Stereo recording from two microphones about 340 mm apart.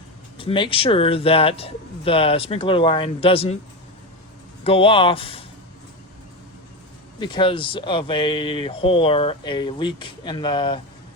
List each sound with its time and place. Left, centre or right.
0.3 s speech: centre
4.6 s speech: centre
7.2 s speech: centre